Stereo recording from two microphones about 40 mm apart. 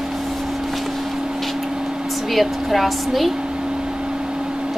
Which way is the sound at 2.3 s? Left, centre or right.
Centre.